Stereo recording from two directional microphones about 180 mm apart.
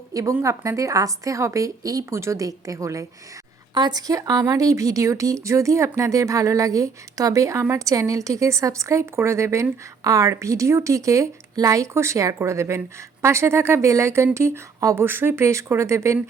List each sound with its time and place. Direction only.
0.1 s speech: 20° right (ahead or behind)